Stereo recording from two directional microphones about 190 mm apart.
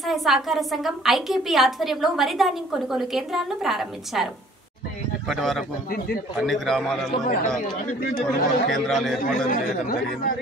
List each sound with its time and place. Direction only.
0.0 s a woman's voice: centre (ahead or behind)
5.3 s a woman's voice: centre (ahead or behind)
5.9 s speech: 50° left (ahead or behind)
6.4 s a woman's voice: centre (ahead or behind)
8.0 s speech: 50° left (ahead or behind)
8.6 s a woman's voice: centre (ahead or behind)
9.2 s speech: 45° left (ahead or behind)